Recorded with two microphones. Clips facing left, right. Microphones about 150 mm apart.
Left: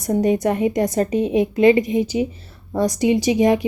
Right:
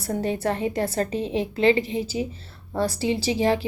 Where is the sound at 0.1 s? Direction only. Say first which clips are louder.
Left 7 dB; 15° left (ahead or behind).